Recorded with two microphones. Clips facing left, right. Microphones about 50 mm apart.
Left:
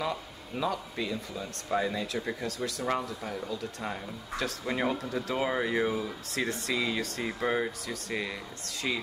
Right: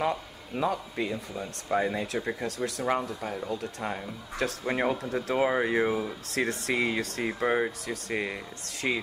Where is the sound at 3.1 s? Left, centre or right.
Right.